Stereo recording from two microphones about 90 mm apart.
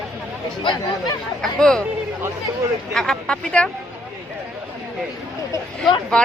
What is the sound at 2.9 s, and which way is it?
Speech, 5° left (ahead or behind).